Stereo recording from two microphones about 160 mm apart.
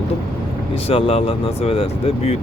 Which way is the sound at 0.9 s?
35° left (ahead or behind).